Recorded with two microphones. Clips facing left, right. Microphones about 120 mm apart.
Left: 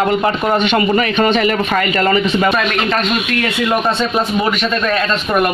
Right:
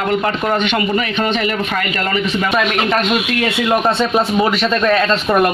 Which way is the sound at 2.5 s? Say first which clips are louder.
Right 1 dB; 15° right (ahead or behind).